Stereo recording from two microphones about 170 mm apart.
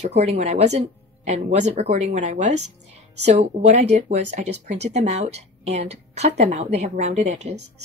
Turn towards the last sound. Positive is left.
turn(degrees=-40)  # may be behind; listen again after turning